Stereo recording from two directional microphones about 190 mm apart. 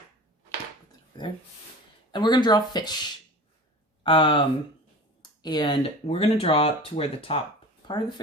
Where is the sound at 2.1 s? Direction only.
25° left (ahead or behind).